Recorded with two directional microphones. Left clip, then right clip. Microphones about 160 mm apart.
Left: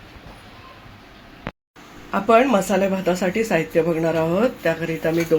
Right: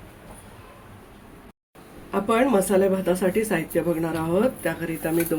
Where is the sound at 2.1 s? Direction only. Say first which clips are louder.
Left 5 dB; 40° left (ahead or behind).